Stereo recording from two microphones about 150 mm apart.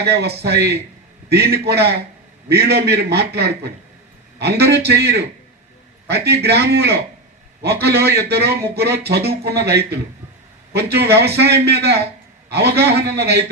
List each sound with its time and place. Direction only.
0.0 s a man's voice: 90° right